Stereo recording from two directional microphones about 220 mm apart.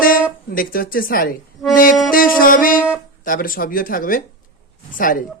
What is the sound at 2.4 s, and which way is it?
Speech, 40° left (ahead or behind).